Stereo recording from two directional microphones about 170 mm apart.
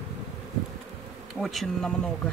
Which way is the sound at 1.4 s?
Centre (ahead or behind).